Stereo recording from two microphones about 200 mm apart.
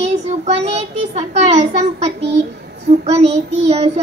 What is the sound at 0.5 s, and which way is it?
A child's voice, 30° right (ahead or behind).